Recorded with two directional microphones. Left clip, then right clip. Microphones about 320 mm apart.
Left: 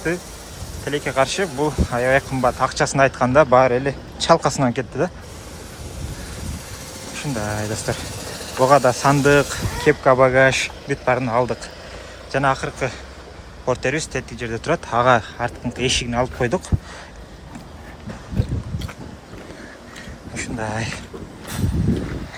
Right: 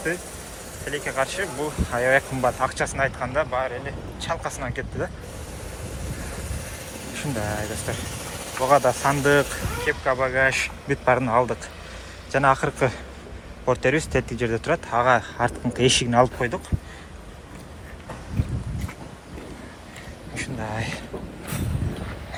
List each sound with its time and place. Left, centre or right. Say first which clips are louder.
0.9 s speech: left 6 dB; centre
7.2 s speech: left 3 dB; centre
20.3 s speech: left 4 dB; centre